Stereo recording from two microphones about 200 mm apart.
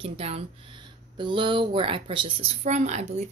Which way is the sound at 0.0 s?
30° right (ahead or behind).